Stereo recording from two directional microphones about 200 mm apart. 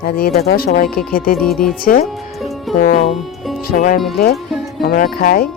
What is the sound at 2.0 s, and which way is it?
Music, centre (ahead or behind).